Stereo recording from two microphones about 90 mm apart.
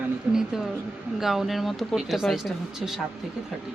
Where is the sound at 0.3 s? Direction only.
5° right (ahead or behind).